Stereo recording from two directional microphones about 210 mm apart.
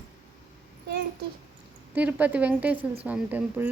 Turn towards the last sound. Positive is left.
turn(degrees=-5)  # may be behind; listen again after turning